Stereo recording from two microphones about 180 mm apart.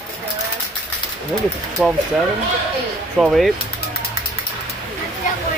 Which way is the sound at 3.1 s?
5° right (ahead or behind).